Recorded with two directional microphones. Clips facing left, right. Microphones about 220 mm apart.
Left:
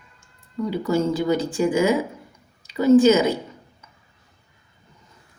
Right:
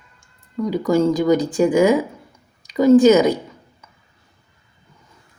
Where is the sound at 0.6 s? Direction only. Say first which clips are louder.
Right 5 dB; 15° right (ahead or behind).